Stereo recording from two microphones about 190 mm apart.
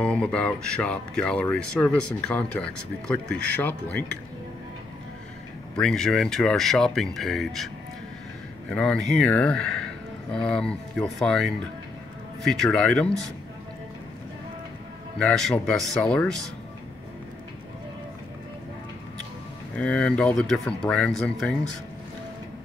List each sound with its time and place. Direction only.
0.0 s speech: 5° left (ahead or behind)
5.8 s speech: centre (ahead or behind)
15.1 s speech: 5° left (ahead or behind)
19.7 s speech: 5° left (ahead or behind)